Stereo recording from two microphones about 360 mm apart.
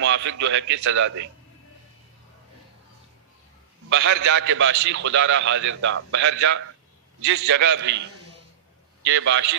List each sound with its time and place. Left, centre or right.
0.0 s a man's voice: right
3.9 s a man's voice: right
9.0 s a man's voice: right